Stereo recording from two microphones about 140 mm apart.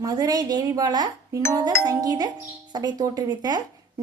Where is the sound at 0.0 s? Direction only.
25° right (ahead or behind).